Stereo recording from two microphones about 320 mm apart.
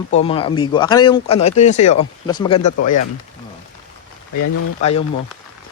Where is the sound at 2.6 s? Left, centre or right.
Left.